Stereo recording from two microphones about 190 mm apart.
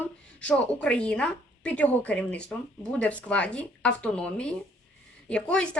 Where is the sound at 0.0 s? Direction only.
5° left (ahead or behind).